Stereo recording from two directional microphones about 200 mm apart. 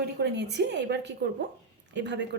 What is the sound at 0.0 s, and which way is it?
A woman's voice, 55° right (ahead or behind).